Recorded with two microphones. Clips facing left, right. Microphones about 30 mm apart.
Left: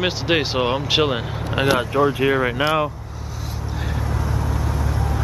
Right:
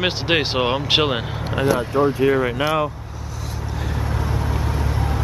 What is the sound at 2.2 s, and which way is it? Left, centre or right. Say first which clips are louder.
Speech: right 1 dB; centre.